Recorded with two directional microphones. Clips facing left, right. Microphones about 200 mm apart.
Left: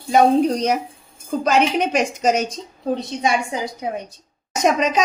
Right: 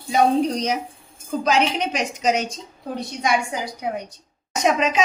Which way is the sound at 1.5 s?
50° left (ahead or behind).